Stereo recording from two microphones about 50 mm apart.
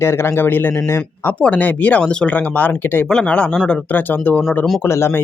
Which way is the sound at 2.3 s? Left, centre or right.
Left.